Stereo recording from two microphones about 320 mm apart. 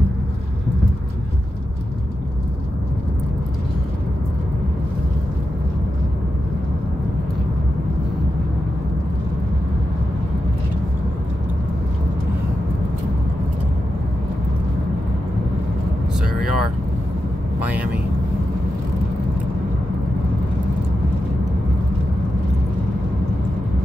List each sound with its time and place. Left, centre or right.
16.3 s vehicle: left
17.6 s vehicle: centre